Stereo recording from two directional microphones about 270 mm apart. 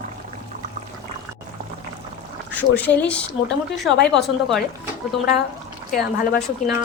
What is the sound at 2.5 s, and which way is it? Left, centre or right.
Speech, centre.